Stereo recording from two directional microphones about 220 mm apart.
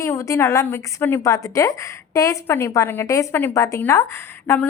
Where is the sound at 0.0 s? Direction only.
15° left (ahead or behind).